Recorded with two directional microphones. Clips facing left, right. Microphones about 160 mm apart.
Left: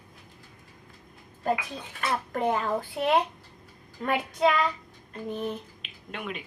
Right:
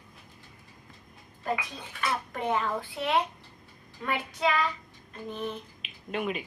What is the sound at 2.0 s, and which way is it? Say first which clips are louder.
A child's voice: left 3 dB; 45° left (ahead or behind).